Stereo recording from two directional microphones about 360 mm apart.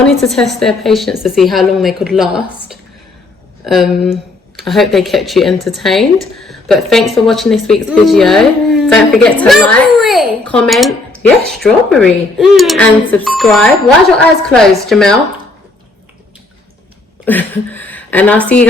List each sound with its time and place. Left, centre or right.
0.0 s speech: centre
17.2 s speech: centre